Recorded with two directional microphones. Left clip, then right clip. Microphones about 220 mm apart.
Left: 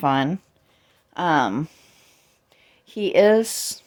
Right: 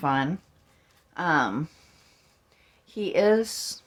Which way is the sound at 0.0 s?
45° left (ahead or behind).